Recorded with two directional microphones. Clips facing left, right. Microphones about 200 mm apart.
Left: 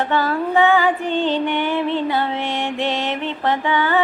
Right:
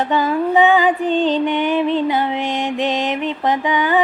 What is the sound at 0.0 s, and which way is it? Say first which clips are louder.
Music: right 2 dB; 15° right (ahead or behind).